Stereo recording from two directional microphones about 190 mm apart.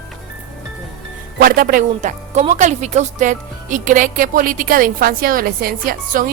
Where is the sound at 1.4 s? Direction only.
50° right (ahead or behind).